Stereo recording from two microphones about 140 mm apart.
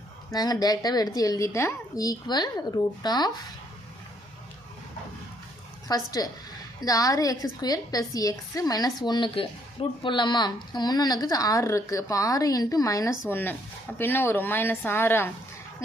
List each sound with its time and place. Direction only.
0.3 s a woman's voice: 25° left (ahead or behind)
5.9 s a woman's voice: 25° left (ahead or behind)